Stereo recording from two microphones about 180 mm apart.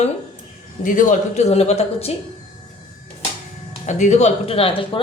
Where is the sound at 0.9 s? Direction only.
45° left (ahead or behind).